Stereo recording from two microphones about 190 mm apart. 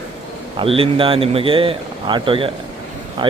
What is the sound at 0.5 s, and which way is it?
Speech, 30° right (ahead or behind).